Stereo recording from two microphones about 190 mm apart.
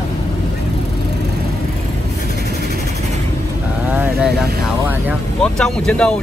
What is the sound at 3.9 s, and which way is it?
Speech, 10° right (ahead or behind).